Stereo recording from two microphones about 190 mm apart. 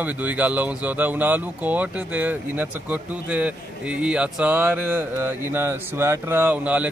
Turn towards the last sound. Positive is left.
turn(degrees=-10)  # may be behind; listen again after turning